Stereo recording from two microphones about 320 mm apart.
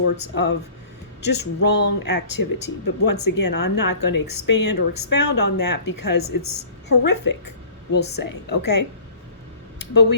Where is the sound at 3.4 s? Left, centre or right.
Left.